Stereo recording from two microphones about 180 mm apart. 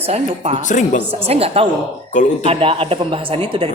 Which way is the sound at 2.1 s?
45° left (ahead or behind).